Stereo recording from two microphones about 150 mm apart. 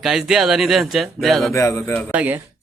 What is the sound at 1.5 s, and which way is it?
Speech, 20° left (ahead or behind).